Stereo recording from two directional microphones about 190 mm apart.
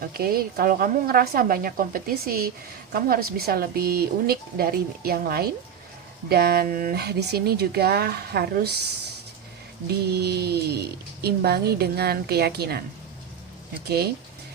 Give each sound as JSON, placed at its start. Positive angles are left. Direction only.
{"t": 0.1, "sound": "speech", "side_deg": -50}
{"t": 10.1, "sound": "speech", "side_deg": -60}
{"t": 13.8, "sound": "speech", "side_deg": -55}